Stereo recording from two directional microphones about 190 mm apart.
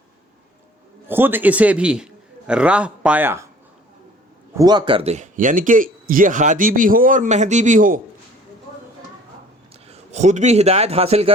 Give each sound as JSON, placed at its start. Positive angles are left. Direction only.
{"t": 1.0, "sound": "a man's voice", "side_deg": -10}
{"t": 4.5, "sound": "speech", "side_deg": -20}
{"t": 9.8, "sound": "a man's voice", "side_deg": -35}